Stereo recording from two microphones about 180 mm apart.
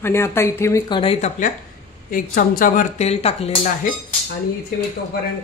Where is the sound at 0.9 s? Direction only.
30° left (ahead or behind).